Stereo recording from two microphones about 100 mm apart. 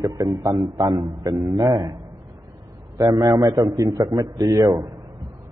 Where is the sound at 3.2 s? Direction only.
35° right (ahead or behind).